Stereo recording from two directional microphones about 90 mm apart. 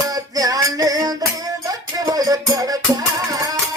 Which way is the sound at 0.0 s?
40° right (ahead or behind).